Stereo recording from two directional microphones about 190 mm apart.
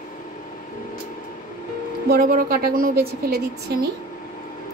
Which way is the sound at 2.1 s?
50° right (ahead or behind).